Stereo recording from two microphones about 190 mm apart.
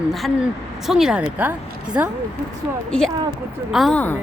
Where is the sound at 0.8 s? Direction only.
Centre (ahead or behind).